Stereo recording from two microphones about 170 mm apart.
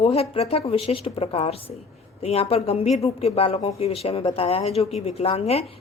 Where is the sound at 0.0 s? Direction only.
35° left (ahead or behind).